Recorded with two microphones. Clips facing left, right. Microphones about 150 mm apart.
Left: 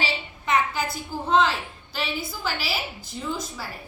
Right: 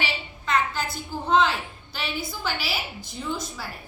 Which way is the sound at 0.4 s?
15° left (ahead or behind).